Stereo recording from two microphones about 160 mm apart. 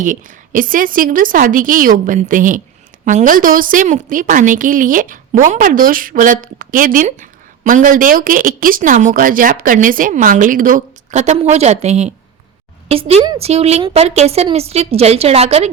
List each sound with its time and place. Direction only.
0.0 s a woman's voice: 55° right (ahead or behind)